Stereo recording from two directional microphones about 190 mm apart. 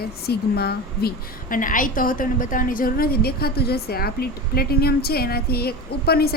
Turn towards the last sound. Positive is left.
turn(degrees=55)  # may be behind; listen again after turning